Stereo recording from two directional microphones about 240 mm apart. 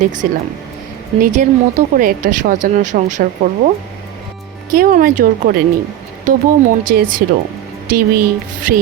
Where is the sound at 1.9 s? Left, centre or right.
Right.